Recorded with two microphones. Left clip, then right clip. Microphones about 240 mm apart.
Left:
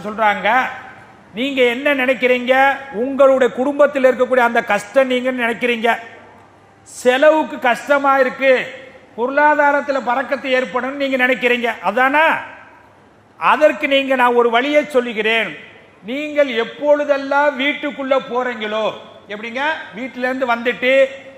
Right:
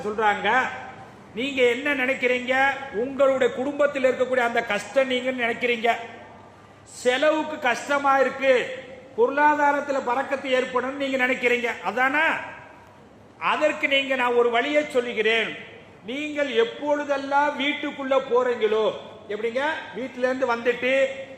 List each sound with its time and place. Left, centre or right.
0.0 s a man's voice: left
7.0 s a man's voice: left
13.4 s a man's voice: left